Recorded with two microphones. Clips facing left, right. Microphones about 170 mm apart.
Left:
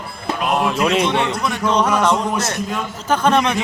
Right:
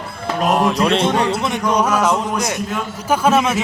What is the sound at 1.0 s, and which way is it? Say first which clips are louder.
Speech: right 1 dB; 45° right (ahead or behind).